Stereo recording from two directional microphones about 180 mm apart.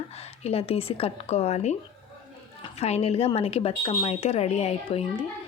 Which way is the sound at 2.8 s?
35° left (ahead or behind).